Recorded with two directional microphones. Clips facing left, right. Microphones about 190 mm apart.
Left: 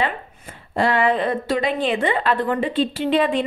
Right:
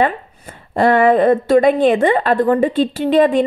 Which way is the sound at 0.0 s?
45° right (ahead or behind).